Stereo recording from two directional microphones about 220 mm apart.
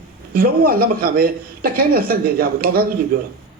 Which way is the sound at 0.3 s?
40° right (ahead or behind).